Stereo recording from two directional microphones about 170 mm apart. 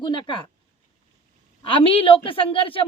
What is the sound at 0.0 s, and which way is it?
Speech, 30° left (ahead or behind).